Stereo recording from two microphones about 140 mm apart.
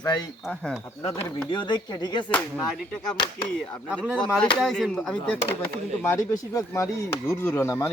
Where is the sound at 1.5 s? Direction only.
35° left (ahead or behind).